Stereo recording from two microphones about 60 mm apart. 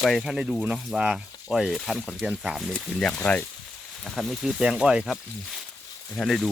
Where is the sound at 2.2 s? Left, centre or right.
Centre.